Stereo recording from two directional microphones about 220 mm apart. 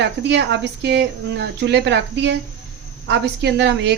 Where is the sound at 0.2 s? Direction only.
50° right (ahead or behind).